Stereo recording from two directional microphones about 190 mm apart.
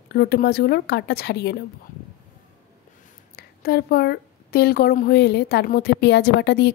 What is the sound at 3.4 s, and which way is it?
A woman's voice, 55° left (ahead or behind).